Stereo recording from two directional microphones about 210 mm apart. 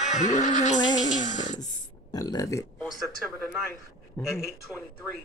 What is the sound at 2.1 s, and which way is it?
Speech, 15° left (ahead or behind).